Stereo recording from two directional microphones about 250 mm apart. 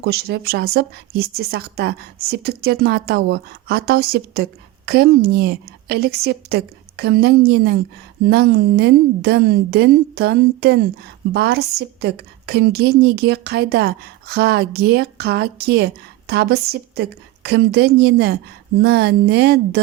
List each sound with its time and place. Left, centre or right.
0.0 s a woman's voice: right